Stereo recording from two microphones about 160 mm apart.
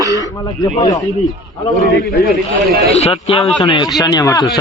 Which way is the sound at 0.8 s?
25° left (ahead or behind).